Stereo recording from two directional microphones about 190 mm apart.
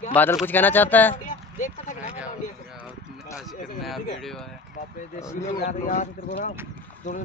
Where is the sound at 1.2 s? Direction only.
40° left (ahead or behind).